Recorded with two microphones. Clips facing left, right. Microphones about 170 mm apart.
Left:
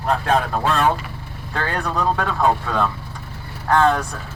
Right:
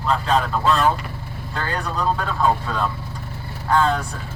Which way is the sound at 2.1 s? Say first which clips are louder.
Left 1 dB; 65° left (ahead or behind).